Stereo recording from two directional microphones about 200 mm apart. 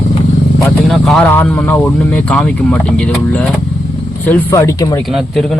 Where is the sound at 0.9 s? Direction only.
Centre (ahead or behind).